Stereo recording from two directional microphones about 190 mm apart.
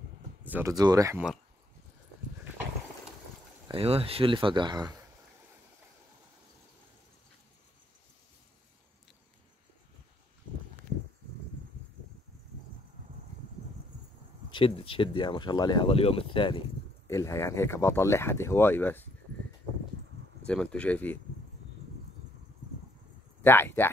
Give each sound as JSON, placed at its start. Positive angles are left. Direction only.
{"t": 0.5, "sound": "speech", "side_deg": -15}
{"t": 3.7, "sound": "speech", "side_deg": -30}
{"t": 14.5, "sound": "speech", "side_deg": 30}
{"t": 17.1, "sound": "speech", "side_deg": 15}
{"t": 20.4, "sound": "speech", "side_deg": 5}
{"t": 23.4, "sound": "speech", "side_deg": 10}